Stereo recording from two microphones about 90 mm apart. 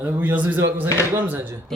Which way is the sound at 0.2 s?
20° right (ahead or behind).